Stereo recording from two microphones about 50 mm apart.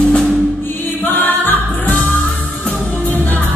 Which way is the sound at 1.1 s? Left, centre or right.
Left.